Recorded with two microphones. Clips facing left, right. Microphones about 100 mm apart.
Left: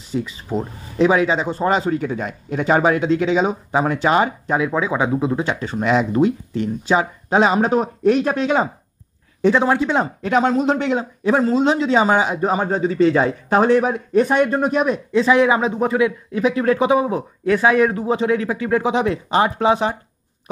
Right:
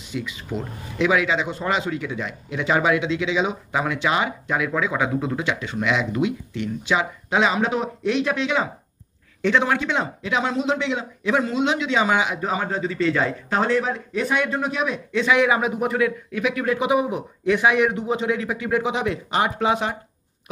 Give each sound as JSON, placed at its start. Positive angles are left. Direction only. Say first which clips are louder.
{"t": 0.1, "sound": "speech", "louder": "left 6 dB", "side_deg": 35}
{"t": 15.2, "sound": "speech", "louder": "left 3 dB", "side_deg": 30}
{"t": 16.3, "sound": "speech", "louder": "left 6 dB", "side_deg": 35}
{"t": 17.6, "sound": "a man's voice", "louder": "left 4 dB", "side_deg": -15}
{"t": 18.0, "sound": "speech", "louder": "left 5 dB", "side_deg": 30}